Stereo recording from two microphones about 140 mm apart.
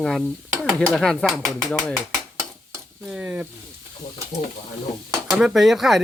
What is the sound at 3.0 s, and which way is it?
Speech, 10° right (ahead or behind).